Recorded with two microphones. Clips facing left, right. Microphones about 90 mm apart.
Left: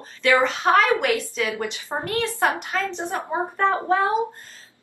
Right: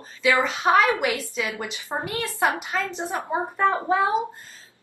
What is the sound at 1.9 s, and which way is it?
A woman's voice, 5° left (ahead or behind).